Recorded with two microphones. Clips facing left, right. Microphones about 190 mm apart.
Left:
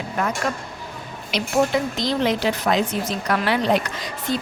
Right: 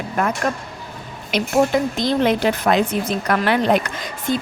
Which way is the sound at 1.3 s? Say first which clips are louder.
Right 3 dB; 50° right (ahead or behind).